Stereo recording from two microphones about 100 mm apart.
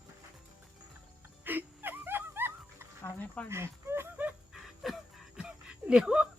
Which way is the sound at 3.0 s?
15° left (ahead or behind).